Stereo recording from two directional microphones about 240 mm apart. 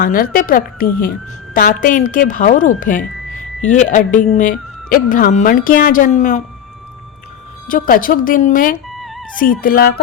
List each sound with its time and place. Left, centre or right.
0.0 s speech: left
7.7 s speech: left
9.0 s music: centre
9.3 s speech: left